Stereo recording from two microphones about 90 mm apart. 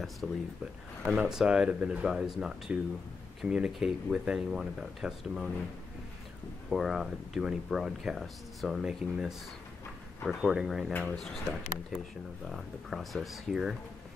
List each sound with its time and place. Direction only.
0.2 s speech: centre (ahead or behind)
6.7 s speech: centre (ahead or behind)
10.2 s speech: 5° right (ahead or behind)
10.9 s speech: 15° left (ahead or behind)
11.1 s speech: 5° left (ahead or behind)